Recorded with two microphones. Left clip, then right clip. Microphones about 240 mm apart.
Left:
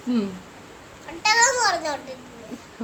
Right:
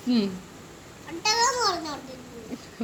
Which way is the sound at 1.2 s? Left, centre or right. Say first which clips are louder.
Left 5 dB; left.